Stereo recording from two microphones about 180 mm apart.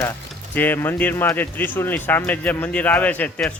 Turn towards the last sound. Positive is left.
turn(degrees=5)  # may be behind; listen again after turning